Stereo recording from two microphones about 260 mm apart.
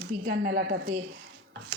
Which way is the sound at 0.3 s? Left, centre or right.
Right.